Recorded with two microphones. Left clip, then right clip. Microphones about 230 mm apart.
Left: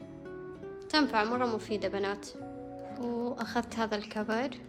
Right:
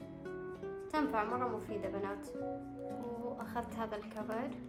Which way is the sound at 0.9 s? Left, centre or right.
Left.